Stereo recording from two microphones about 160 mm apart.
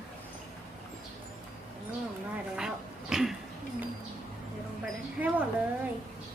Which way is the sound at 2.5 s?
5° right (ahead or behind).